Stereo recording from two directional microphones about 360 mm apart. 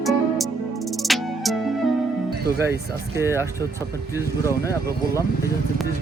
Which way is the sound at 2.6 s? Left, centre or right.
Centre.